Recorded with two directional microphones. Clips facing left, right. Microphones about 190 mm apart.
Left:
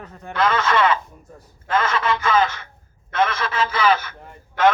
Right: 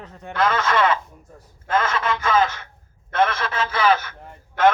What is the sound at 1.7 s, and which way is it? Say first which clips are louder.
Radio: left 1 dB; 45° right (ahead or behind).